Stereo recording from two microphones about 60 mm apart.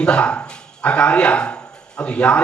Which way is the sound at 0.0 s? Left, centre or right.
Centre.